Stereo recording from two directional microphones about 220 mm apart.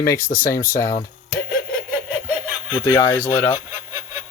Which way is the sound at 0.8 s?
10° left (ahead or behind).